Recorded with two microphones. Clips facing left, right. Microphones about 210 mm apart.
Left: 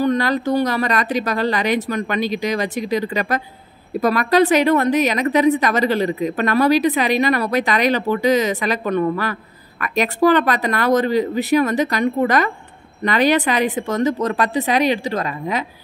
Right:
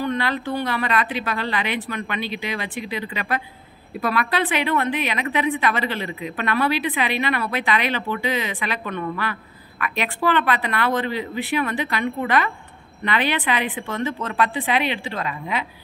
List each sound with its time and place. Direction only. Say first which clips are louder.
0.0 s a woman's voice: left 6 dB; 40° left (ahead or behind)